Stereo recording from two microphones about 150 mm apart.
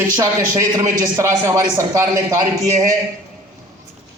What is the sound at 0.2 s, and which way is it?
A man's voice, 25° right (ahead or behind).